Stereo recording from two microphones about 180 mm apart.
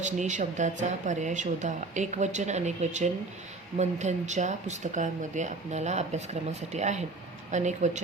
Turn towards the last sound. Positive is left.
turn(degrees=-40)  # may be behind; listen again after turning